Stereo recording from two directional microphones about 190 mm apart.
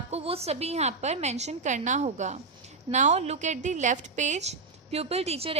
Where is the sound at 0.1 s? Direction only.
30° right (ahead or behind).